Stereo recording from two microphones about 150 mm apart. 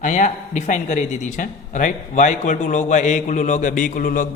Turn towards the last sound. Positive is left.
turn(degrees=65)  # may be behind; listen again after turning